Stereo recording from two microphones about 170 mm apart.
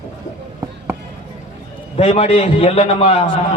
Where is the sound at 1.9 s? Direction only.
35° left (ahead or behind).